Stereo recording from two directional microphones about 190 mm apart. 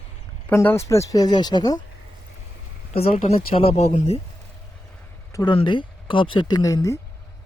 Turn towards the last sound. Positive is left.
turn(degrees=15)  # may be behind; listen again after turning